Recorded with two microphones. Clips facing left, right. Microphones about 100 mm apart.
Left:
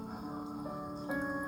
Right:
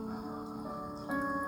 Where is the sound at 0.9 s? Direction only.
5° right (ahead or behind).